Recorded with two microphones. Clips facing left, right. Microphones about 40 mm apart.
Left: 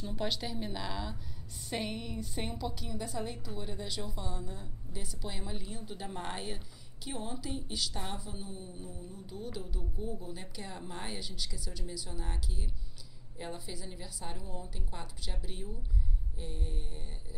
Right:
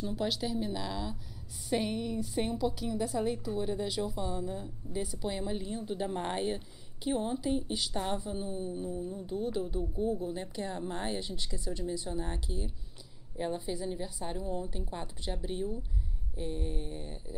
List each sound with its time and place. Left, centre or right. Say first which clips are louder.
0.0 s a woman's voice: right 3 dB; centre